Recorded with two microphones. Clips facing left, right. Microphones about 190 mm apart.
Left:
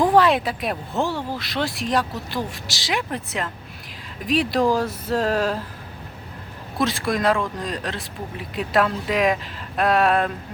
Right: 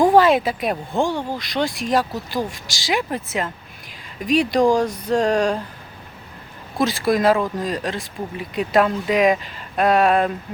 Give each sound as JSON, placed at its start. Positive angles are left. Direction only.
{"t": 0.0, "sound": "speech", "side_deg": 0}
{"t": 6.7, "sound": "speech", "side_deg": 0}